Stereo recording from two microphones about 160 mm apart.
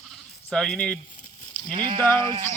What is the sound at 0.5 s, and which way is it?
Speech, 5° left (ahead or behind).